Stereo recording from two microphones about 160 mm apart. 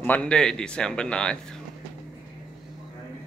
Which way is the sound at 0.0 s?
10° left (ahead or behind).